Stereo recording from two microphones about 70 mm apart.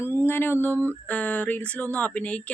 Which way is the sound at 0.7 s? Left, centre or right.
Right.